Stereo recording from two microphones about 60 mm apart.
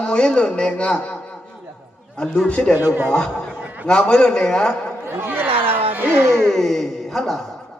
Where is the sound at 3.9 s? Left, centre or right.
Centre.